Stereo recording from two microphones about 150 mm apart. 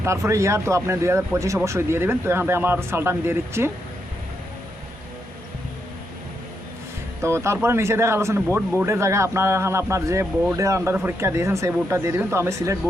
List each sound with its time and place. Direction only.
0.0 s a man's voice: 20° right (ahead or behind)
7.2 s a man's voice: 20° right (ahead or behind)